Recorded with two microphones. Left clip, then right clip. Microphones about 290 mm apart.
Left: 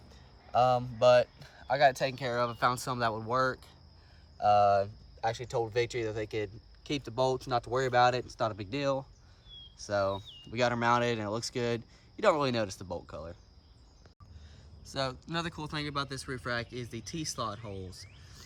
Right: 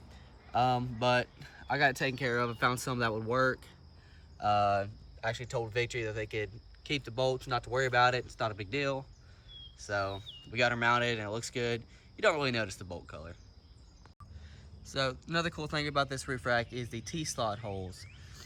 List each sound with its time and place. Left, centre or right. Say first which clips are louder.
0.5 s speech: left 3 dB; centre
14.8 s speech: right 1 dB; centre